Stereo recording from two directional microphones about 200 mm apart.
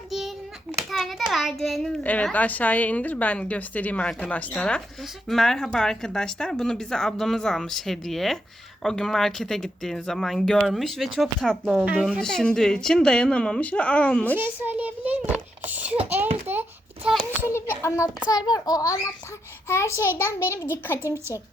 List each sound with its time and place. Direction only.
0.1 s child singing: centre (ahead or behind)
0.9 s a child's voice: centre (ahead or behind)
14.3 s a child's voice: 10° right (ahead or behind)
15.6 s a sound: 5° right (ahead or behind)
17.5 s a child's voice: 15° left (ahead or behind)